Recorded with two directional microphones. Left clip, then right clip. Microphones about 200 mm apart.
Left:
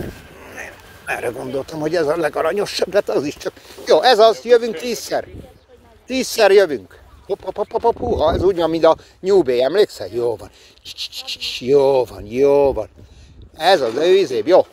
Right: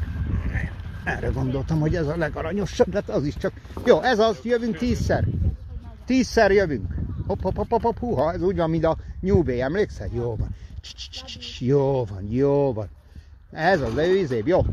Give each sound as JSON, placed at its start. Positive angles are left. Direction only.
{"t": 0.6, "sound": "speech", "side_deg": 30}